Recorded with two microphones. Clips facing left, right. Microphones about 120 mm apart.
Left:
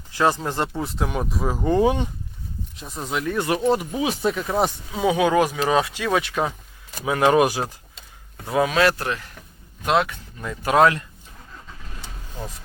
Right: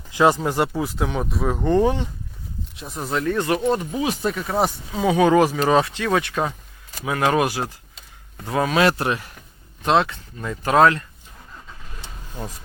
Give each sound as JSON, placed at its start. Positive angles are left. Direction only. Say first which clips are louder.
{"t": 0.1, "sound": "speech", "louder": "right 3 dB", "side_deg": -15}
{"t": 2.7, "sound": "speech", "louder": "right 2 dB", "side_deg": 0}
{"t": 3.1, "sound": "speech", "louder": "right 2 dB", "side_deg": 10}
{"t": 6.0, "sound": "speech", "louder": "right 1 dB", "side_deg": 15}
{"t": 8.8, "sound": "speech", "louder": "right 1 dB", "side_deg": -15}
{"t": 10.0, "sound": "speech", "louder": "right 1 dB", "side_deg": 10}